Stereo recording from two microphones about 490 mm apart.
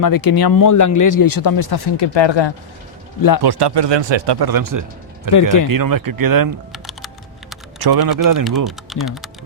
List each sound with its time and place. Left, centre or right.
0.0 s speech: left
3.2 s speech: left
3.4 s speech: right
5.3 s speech: left
5.6 s speech: right
6.7 s typing: centre
7.8 s speech: right
8.9 s speech: centre